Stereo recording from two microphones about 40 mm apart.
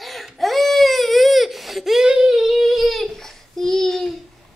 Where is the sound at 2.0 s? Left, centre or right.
Centre.